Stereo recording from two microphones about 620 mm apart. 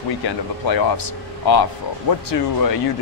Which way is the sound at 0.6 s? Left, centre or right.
Left.